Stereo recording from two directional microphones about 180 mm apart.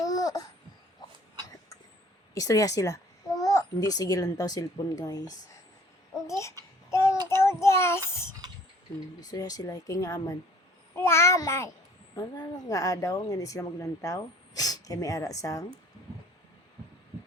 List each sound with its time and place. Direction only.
0.0 s babbling: 20° left (ahead or behind)
2.3 s a child's voice: 20° left (ahead or behind)
6.2 s babbling: 15° left (ahead or behind)
6.9 s child singing: 15° left (ahead or behind)
9.2 s a child's voice: 20° left (ahead or behind)